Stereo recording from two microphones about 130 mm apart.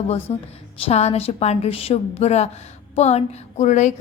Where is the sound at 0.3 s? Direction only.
45° left (ahead or behind).